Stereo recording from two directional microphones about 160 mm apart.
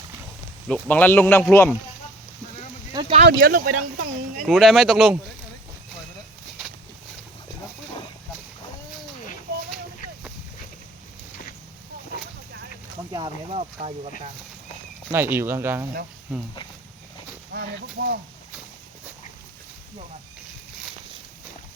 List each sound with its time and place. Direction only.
0.7 s speech: 10° left (ahead or behind)
2.9 s a sound: 35° right (ahead or behind)
3.2 s speech: 80° right
4.4 s speech: centre (ahead or behind)
13.1 s speech: 25° right (ahead or behind)
13.5 s speech: 40° right (ahead or behind)
15.1 s speech: 15° right (ahead or behind)
17.5 s speech: 90° right